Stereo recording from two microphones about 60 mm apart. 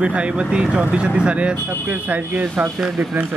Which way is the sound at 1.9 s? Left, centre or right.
Right.